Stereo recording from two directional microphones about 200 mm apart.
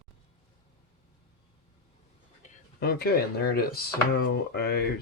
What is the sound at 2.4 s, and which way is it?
Speech, 50° left (ahead or behind).